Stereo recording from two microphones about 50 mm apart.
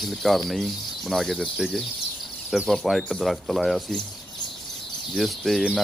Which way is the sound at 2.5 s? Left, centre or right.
Centre.